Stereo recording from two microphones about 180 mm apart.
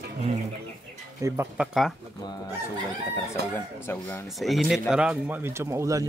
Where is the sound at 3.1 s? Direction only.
15° left (ahead or behind).